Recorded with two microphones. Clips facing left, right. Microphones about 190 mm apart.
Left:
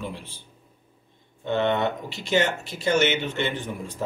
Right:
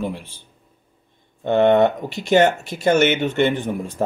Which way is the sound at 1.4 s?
55° right (ahead or behind).